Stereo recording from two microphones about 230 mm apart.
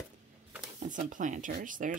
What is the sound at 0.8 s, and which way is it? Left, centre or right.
Speech, right.